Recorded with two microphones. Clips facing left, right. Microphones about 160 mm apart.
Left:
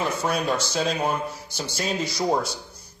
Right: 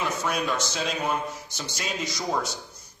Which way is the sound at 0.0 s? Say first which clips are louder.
Left 3 dB; 35° left (ahead or behind).